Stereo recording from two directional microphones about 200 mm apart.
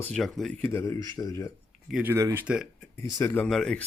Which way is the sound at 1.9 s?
5° right (ahead or behind).